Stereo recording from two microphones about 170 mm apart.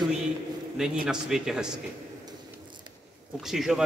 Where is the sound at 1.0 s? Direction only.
5° right (ahead or behind).